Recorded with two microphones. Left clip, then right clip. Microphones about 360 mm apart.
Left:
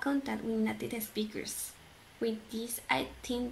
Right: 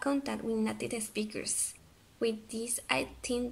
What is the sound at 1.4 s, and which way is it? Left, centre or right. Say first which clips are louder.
Speech: right 3 dB; left.